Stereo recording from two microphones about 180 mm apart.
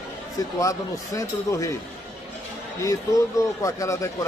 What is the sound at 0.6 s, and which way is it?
Speech, 20° left (ahead or behind).